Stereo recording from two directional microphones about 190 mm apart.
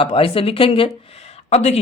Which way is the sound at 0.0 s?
30° left (ahead or behind).